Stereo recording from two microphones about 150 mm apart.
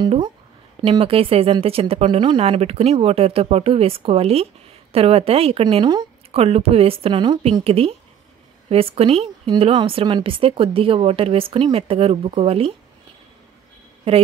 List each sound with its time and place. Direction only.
0.8 s speech: 40° right (ahead or behind)
14.1 s speech: 35° right (ahead or behind)